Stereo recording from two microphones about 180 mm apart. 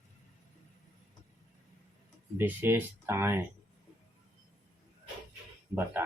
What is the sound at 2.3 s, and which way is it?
Speech, 10° right (ahead or behind).